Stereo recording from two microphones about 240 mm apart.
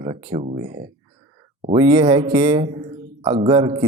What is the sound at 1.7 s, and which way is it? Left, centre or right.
Speech, centre.